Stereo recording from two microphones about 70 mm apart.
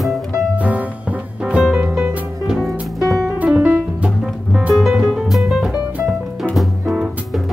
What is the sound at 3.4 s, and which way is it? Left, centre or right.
Music, right.